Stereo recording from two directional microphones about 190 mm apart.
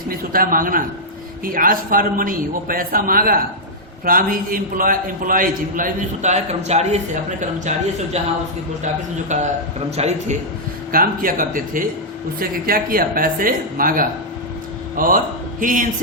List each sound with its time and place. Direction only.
0.1 s a man's voice: 45° right (ahead or behind)
9.3 s a man's voice: 40° right (ahead or behind)
10.9 s a man's voice: 50° right (ahead or behind)